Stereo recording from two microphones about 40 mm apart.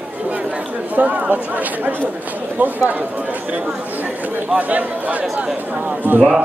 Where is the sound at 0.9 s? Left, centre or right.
Right.